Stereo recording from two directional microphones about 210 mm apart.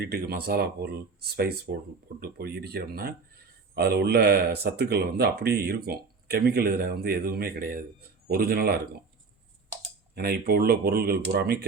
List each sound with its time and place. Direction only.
0.0 s speech: 45° right (ahead or behind)
10.2 s speech: 50° right (ahead or behind)